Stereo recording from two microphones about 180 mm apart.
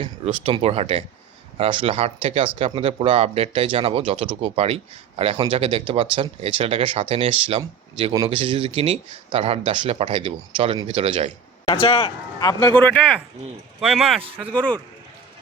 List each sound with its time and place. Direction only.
0.0 s speech: 30° right (ahead or behind)
11.7 s a man's voice: 30° left (ahead or behind); by 14.8 s 5° left (ahead or behind)